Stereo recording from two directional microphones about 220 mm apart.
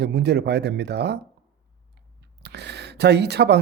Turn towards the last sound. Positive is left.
turn(degrees=-50)  # may be behind; listen again after turning